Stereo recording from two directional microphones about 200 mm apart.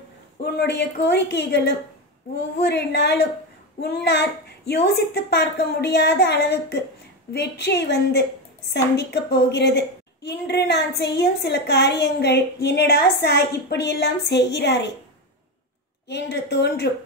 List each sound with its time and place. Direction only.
0.4 s a woman's voice: 55° left (ahead or behind)
16.1 s a woman's voice: 55° left (ahead or behind)